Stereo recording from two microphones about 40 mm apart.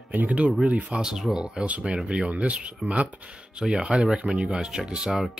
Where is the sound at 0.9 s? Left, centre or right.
Centre.